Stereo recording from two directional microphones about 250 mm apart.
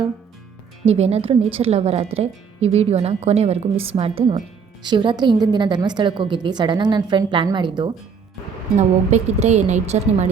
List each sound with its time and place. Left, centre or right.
0.9 s speech: right